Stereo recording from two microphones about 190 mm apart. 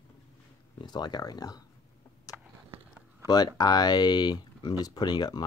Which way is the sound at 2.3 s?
20° left (ahead or behind).